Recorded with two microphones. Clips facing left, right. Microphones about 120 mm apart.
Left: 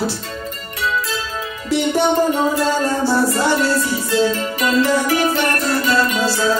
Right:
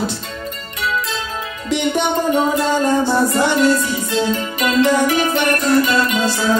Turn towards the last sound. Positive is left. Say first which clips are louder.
# even
turn(degrees=-20)  # may be behind; listen again after turning